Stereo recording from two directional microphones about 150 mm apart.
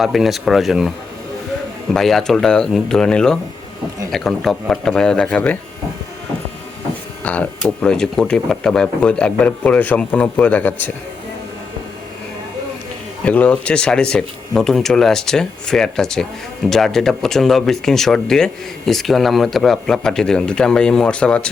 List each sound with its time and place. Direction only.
0.0 s speech: centre (ahead or behind)
7.6 s speech: 5° left (ahead or behind)
13.2 s speech: 10° left (ahead or behind)